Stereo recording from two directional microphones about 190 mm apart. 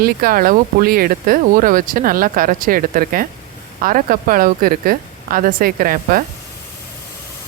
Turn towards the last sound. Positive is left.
turn(degrees=-50)  # may be behind; listen again after turning